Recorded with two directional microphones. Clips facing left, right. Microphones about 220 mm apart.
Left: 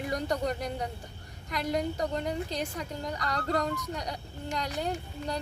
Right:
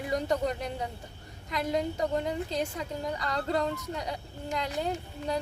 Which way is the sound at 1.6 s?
25° right (ahead or behind).